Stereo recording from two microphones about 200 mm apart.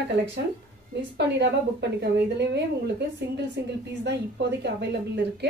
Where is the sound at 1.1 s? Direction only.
60° right (ahead or behind).